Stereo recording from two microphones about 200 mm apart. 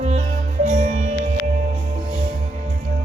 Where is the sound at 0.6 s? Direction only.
35° right (ahead or behind).